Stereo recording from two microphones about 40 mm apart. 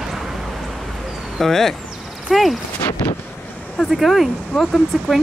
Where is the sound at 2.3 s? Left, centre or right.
Centre.